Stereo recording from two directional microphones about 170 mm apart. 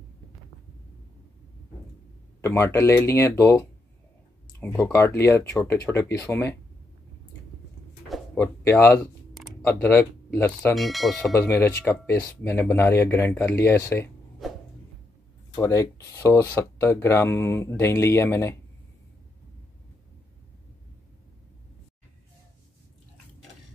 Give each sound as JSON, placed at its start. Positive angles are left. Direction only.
{"t": 2.4, "sound": "speech", "side_deg": 15}
{"t": 8.4, "sound": "speech", "side_deg": 15}
{"t": 10.8, "sound": "speech", "side_deg": 0}
{"t": 11.3, "sound": "speech", "side_deg": 15}
{"t": 14.4, "sound": "a sound", "side_deg": 0}
{"t": 15.5, "sound": "speech", "side_deg": 15}